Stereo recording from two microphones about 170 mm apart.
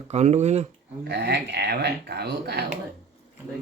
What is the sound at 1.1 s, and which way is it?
Speech, 80° right.